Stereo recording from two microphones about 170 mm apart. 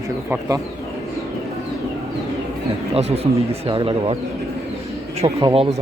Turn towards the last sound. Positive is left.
turn(degrees=-35)  # may be behind; listen again after turning